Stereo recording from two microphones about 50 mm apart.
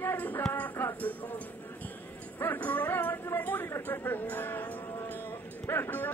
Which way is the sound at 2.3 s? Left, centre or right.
Left.